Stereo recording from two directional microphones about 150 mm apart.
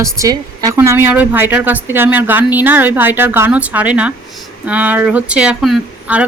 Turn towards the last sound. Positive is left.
turn(degrees=-5)  # may be behind; listen again after turning